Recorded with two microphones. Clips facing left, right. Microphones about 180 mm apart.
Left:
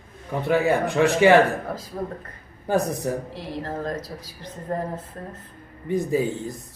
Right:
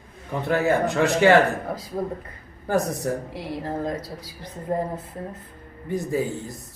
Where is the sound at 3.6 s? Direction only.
15° right (ahead or behind).